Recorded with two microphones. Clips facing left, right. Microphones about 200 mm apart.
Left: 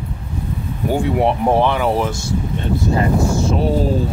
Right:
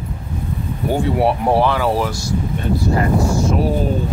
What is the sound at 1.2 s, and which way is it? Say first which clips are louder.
Speech: even; 20° left (ahead or behind).